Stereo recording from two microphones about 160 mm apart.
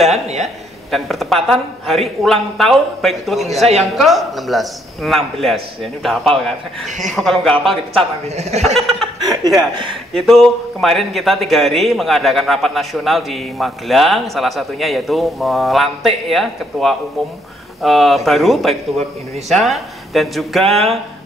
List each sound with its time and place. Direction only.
0.1 s a woman's voice: 45° right (ahead or behind)
0.9 s a man's voice: centre (ahead or behind)
8.0 s a woman's voice: 45° right (ahead or behind)
8.7 s a man's voice: centre (ahead or behind)
9.2 s speech: 25° right (ahead or behind)
10.1 s a man's voice: centre (ahead or behind)
20.6 s speech: 40° right (ahead or behind)